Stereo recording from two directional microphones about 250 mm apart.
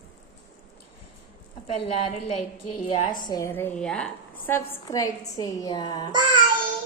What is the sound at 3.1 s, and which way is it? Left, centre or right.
A woman's voice, centre.